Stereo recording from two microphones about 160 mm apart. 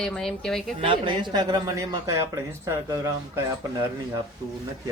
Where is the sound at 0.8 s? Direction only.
30° right (ahead or behind).